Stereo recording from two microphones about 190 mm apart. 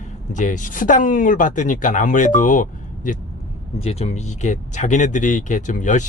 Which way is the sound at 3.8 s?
35° left (ahead or behind).